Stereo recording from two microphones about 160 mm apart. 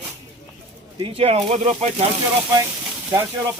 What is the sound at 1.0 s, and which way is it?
Speech, 35° right (ahead or behind).